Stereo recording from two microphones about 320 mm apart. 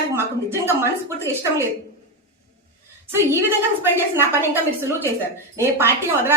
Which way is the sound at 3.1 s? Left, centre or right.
Centre.